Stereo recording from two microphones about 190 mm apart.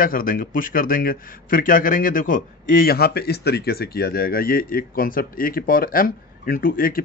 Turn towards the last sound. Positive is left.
turn(degrees=50)  # may be behind; listen again after turning